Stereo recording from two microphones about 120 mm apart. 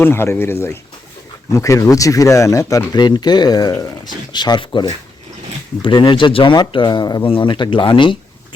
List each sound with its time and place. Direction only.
0.0 s speech: 20° left (ahead or behind); by 8.2 s 45° left (ahead or behind)